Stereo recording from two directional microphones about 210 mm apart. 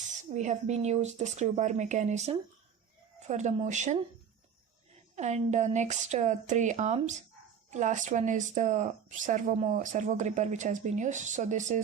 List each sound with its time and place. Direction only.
0.3 s speech: 35° right (ahead or behind)
5.1 s speech: 35° right (ahead or behind)